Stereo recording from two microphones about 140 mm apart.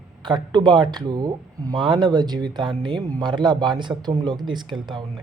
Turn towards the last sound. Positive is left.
turn(degrees=-30)  # may be behind; listen again after turning